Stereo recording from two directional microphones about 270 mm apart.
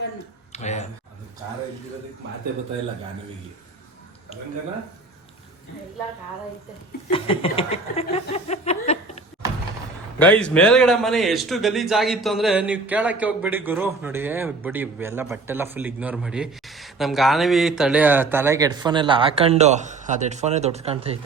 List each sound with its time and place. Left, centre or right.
0.5 s a sound: left
7.1 s chuckle: centre
10.2 s a man's voice: centre; by 21.2 s right